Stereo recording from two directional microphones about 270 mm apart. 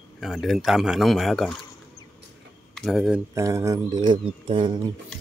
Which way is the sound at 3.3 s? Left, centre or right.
Centre.